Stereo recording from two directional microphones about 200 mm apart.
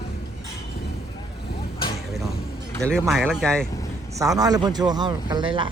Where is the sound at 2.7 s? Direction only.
5° left (ahead or behind).